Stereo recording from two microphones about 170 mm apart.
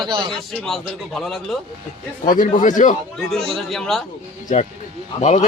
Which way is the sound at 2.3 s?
50° left (ahead or behind).